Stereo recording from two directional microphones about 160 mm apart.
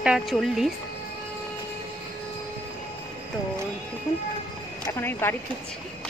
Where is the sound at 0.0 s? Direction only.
5° right (ahead or behind).